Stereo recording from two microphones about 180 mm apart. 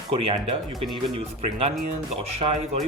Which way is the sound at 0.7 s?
Centre (ahead or behind).